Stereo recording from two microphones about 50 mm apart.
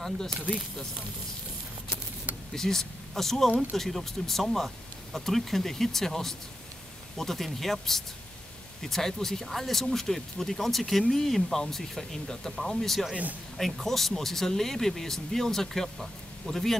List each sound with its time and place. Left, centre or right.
2.5 s speech: centre
13.1 s speech: right
13.6 s speech: centre